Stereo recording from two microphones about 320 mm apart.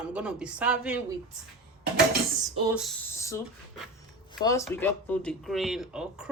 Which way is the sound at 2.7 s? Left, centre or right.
Centre.